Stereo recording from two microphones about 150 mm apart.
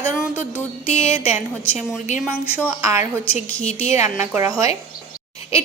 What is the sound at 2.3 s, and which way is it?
A woman's voice, 10° right (ahead or behind).